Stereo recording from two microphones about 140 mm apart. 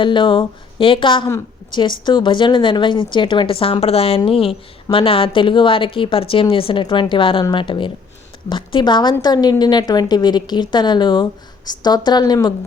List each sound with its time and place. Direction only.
0.0 s a woman's voice: 35° left (ahead or behind)